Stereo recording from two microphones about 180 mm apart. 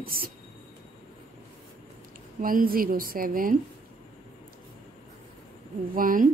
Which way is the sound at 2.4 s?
50° right (ahead or behind).